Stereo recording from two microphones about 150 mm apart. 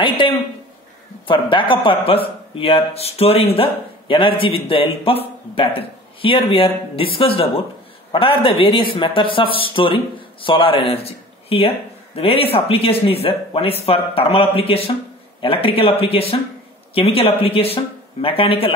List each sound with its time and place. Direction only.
1.2 s speech: 35° left (ahead or behind)